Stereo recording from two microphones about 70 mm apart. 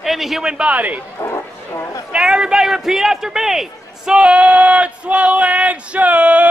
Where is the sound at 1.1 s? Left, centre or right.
Left.